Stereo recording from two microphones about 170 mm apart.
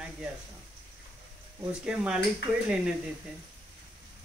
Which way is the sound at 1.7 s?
5° right (ahead or behind).